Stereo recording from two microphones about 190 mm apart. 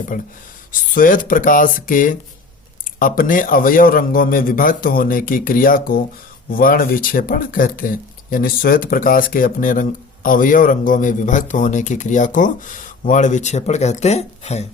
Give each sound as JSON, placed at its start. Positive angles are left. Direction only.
{"t": 0.1, "sound": "a man's voice", "side_deg": 45}